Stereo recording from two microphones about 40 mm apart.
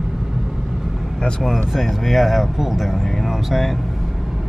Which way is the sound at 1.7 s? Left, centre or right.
Centre.